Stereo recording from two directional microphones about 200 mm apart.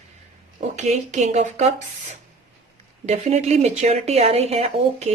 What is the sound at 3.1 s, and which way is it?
Speech, 35° right (ahead or behind).